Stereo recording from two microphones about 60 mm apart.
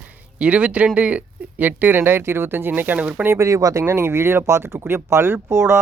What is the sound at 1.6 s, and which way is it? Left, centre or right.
Speech, right.